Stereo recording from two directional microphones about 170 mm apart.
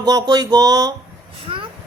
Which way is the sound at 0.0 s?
20° right (ahead or behind).